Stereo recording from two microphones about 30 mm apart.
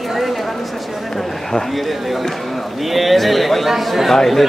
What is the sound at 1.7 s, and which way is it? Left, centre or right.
A man's voice, centre.